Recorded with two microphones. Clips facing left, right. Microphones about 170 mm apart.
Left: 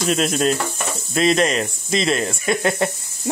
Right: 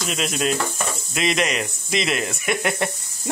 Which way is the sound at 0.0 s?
40° left (ahead or behind).